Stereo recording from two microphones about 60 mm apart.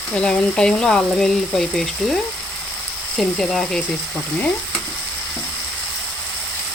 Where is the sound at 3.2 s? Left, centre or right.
Centre.